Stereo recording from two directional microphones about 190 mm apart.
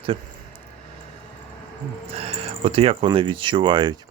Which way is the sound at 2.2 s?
30° right (ahead or behind).